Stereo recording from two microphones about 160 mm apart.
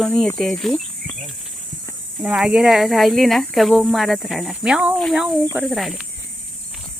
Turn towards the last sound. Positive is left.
turn(degrees=0)  # may be behind; listen again after turning